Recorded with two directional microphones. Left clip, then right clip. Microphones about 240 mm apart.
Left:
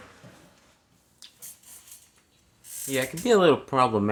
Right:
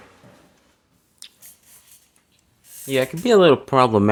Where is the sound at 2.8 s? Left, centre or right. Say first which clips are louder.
Right 5 dB; right.